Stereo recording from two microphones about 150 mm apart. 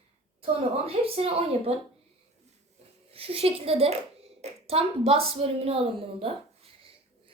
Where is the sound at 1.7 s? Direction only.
45° right (ahead or behind).